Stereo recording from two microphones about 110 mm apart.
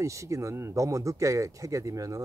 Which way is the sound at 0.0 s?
30° right (ahead or behind).